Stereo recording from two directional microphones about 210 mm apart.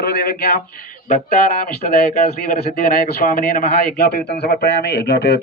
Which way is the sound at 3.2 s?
45° left (ahead or behind).